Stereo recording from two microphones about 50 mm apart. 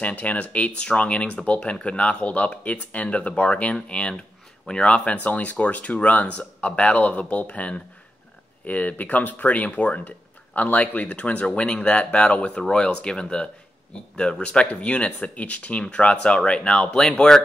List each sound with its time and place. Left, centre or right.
0.0 s speech: left; by 17.4 s centre